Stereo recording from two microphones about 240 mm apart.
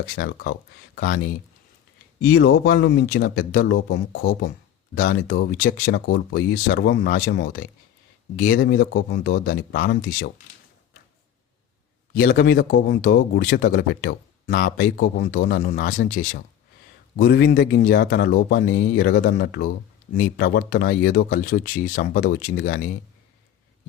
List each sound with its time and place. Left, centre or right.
0.2 s speech: left
2.2 s speech: left
12.1 s speech: left